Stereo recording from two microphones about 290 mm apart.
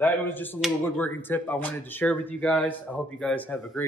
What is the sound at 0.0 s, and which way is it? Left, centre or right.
Speech, centre.